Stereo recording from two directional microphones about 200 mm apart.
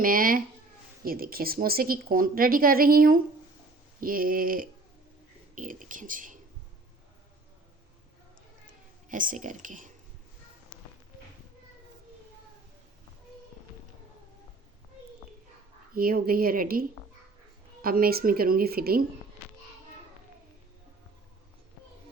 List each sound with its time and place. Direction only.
0.0 s a woman's voice: 45° right (ahead or behind)
9.0 s speech: 40° right (ahead or behind)
16.0 s a woman's voice: 45° right (ahead or behind)
17.8 s a woman's voice: 50° right (ahead or behind)